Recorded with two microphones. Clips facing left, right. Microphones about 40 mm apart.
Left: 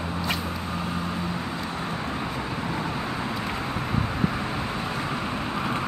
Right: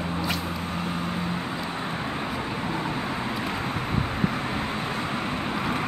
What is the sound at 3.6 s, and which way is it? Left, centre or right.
Vehicle, right.